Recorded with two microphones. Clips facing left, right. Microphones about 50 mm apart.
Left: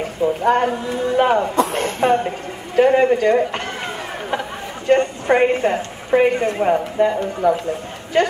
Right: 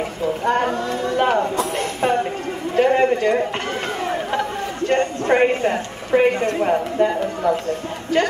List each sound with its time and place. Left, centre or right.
0.4 s speech: centre
0.8 s a woman's voice: centre
1.2 s a sound: centre
4.8 s speech: centre
7.4 s a woman's voice: centre